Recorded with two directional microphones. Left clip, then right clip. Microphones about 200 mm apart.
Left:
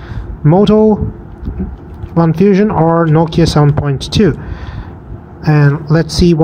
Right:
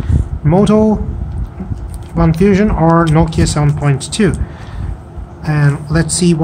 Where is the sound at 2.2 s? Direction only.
20° left (ahead or behind).